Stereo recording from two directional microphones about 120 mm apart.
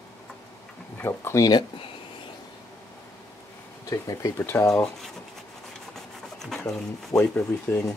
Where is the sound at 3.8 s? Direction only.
30° left (ahead or behind).